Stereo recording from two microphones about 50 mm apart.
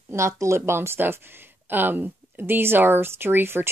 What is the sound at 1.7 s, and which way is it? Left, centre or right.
Speech, right.